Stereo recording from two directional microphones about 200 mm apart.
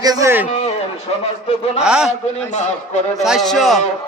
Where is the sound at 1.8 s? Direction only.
5° right (ahead or behind).